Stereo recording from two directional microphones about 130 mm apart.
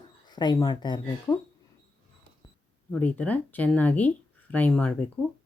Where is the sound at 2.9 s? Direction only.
10° left (ahead or behind).